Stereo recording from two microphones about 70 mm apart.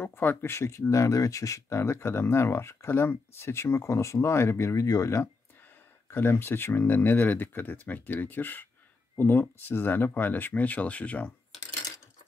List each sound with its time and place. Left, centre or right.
0.0 s speech: left
6.0 s speech: left